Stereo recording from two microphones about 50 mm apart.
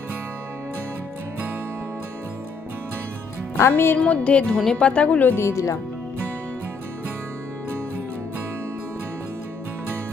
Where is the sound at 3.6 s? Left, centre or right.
Left.